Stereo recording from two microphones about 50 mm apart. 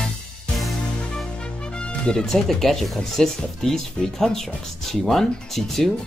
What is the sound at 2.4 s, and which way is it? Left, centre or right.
Speech, centre.